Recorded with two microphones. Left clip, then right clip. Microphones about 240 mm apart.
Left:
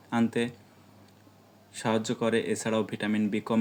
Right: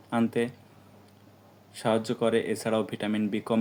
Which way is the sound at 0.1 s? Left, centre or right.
Left.